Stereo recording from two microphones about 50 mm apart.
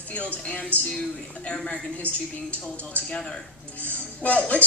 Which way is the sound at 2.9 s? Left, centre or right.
Left.